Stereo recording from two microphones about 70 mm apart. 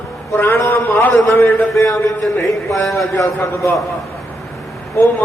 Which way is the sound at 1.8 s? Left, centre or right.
Left.